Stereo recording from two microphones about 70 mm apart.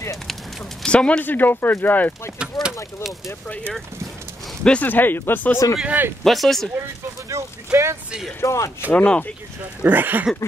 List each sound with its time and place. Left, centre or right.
0.8 s speech: centre
2.6 s a sound: left
4.8 s speech: left
5.9 s speech: right
6.2 s speech: centre
6.8 s speech: right
8.4 s speech: left
8.9 s speech: centre
9.8 s speech: right